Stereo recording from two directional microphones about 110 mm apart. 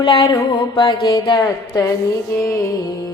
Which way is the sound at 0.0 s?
50° left (ahead or behind).